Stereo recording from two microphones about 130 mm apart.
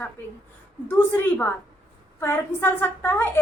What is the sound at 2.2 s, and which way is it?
A woman's voice, 15° left (ahead or behind).